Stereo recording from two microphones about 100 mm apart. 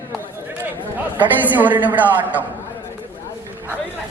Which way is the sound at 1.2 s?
15° right (ahead or behind).